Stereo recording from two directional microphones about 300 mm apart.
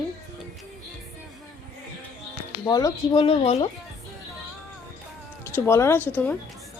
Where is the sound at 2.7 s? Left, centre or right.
Centre.